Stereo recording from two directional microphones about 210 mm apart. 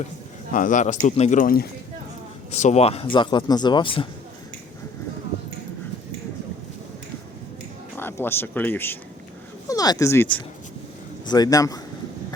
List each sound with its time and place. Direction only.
0.5 s speech: 40° left (ahead or behind)
7.9 s a man's voice: 10° left (ahead or behind)